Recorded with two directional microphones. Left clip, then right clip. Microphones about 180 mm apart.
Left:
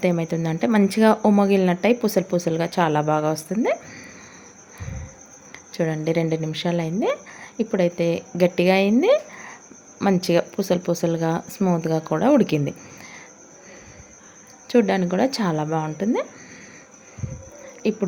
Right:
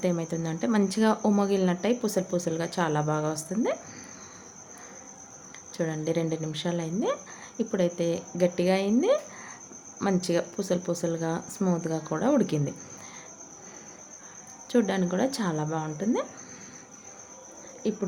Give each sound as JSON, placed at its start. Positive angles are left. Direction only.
{"t": 0.0, "sound": "speech", "side_deg": 25}
{"t": 5.7, "sound": "speech", "side_deg": 20}
{"t": 14.7, "sound": "speech", "side_deg": 20}
{"t": 17.8, "sound": "speech", "side_deg": 25}